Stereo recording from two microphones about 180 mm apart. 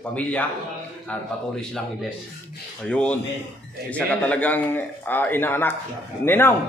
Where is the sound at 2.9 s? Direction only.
5° left (ahead or behind).